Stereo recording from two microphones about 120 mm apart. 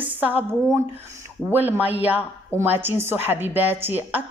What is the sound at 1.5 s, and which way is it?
A woman's voice, 15° right (ahead or behind).